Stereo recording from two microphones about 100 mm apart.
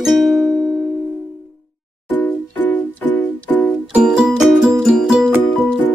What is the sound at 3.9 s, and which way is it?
Music, 10° right (ahead or behind).